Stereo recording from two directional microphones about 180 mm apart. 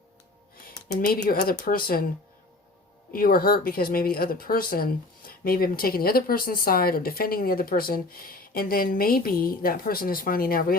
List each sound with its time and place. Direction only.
1.1 s speech: 55° left (ahead or behind)
3.1 s speech: 55° left (ahead or behind)